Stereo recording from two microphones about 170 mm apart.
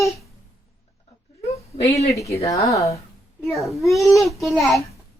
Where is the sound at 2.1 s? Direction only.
20° left (ahead or behind).